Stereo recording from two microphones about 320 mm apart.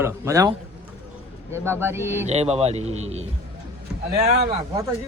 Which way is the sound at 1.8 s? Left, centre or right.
Centre.